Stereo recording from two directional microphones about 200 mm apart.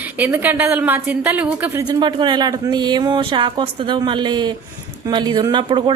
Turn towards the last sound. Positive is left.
turn(degrees=-25)  # may be behind; listen again after turning